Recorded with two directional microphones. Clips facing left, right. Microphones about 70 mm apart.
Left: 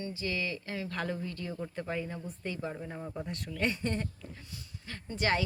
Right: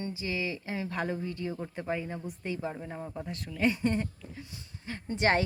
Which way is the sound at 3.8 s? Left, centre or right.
Centre.